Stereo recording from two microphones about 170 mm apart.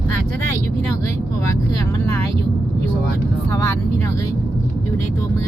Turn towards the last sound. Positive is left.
turn(degrees=15)  # may be behind; listen again after turning